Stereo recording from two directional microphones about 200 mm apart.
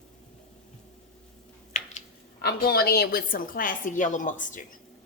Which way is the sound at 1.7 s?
35° left (ahead or behind).